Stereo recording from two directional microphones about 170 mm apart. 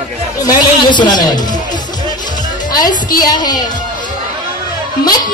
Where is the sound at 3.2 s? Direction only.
25° left (ahead or behind).